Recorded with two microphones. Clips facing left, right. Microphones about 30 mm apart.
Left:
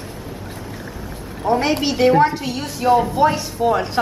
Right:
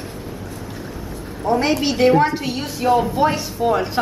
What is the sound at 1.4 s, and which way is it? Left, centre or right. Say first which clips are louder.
Speech: left 1 dB; left.